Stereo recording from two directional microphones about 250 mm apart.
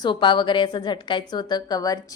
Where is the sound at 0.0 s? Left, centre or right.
Centre.